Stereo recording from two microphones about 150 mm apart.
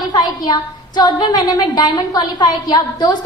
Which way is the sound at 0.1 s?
25° left (ahead or behind).